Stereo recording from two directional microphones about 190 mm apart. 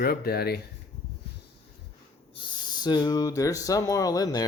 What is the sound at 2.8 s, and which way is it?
Speech, 20° left (ahead or behind).